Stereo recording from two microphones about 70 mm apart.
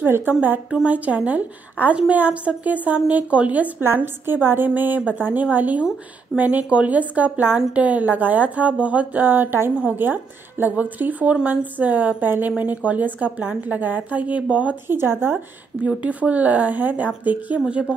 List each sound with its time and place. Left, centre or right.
0.0 s a woman's voice: right
14.9 s speech: right
15.8 s a woman's voice: centre